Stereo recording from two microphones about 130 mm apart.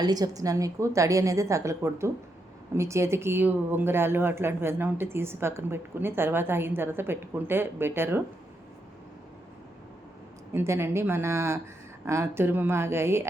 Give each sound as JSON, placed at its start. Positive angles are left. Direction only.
{"t": 0.0, "sound": "a woman's voice", "side_deg": -30}
{"t": 10.5, "sound": "a woman's voice", "side_deg": -20}